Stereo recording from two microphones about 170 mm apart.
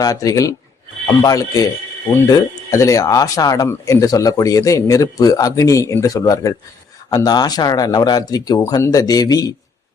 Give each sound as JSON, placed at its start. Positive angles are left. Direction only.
{"t": 0.0, "sound": "speech", "side_deg": 20}